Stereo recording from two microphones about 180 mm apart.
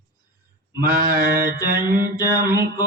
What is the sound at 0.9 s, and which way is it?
Mantra, 55° right (ahead or behind).